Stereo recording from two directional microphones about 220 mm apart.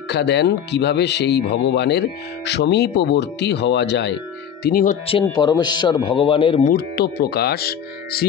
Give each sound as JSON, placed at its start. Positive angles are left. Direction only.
{"t": 0.1, "sound": "speech", "side_deg": 50}
{"t": 5.2, "sound": "speech", "side_deg": 20}
{"t": 6.7, "sound": "speech", "side_deg": 45}